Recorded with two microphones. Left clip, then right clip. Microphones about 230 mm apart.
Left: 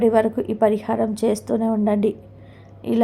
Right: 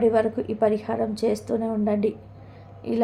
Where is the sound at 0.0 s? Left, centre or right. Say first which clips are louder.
Left 3 dB; centre.